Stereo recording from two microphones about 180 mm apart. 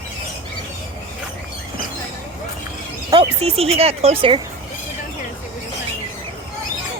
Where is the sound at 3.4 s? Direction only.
35° right (ahead or behind).